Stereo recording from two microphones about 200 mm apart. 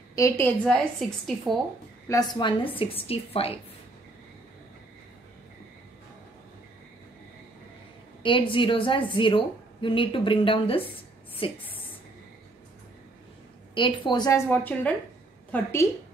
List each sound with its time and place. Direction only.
0.1 s a woman's voice: 15° left (ahead or behind)
0.7 s a woman's voice: centre (ahead or behind)
2.0 s a woman's voice: 20° left (ahead or behind)
8.2 s a woman's voice: 25° left (ahead or behind)
13.7 s a woman's voice: 25° left (ahead or behind)